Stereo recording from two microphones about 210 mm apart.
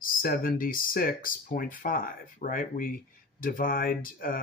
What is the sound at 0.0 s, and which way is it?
Speech, 40° left (ahead or behind).